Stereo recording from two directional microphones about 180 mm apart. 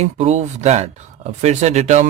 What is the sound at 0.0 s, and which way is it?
Speech, 40° right (ahead or behind).